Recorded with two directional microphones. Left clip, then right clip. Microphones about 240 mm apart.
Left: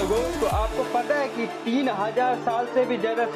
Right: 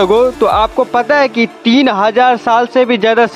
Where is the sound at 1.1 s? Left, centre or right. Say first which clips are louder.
Right 15 dB; right.